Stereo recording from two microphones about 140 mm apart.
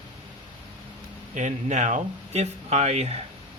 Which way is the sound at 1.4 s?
60° right (ahead or behind).